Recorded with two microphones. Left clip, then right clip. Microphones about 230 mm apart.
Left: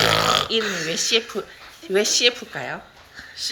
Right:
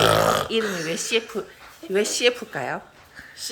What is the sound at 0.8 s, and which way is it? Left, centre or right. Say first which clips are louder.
Speech: left 3 dB; centre.